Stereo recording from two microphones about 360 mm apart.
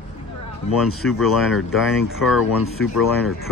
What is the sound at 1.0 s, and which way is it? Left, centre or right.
Speech, centre.